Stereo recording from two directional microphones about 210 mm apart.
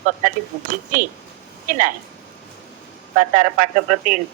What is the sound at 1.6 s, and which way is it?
Speech, 40° right (ahead or behind).